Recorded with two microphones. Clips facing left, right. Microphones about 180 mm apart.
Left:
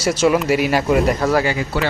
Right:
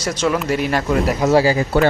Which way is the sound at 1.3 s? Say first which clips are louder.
Right 3 dB; 30° right (ahead or behind).